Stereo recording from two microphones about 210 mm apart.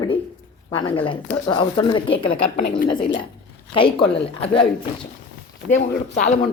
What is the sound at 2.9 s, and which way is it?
Speech, 40° left (ahead or behind).